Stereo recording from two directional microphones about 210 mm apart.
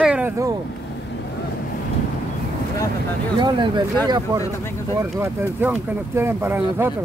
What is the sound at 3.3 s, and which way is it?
Speech, 20° right (ahead or behind).